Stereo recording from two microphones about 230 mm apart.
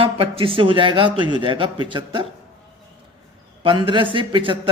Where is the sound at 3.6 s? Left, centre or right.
Right.